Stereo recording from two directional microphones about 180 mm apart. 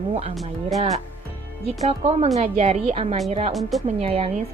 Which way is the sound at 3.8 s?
35° right (ahead or behind).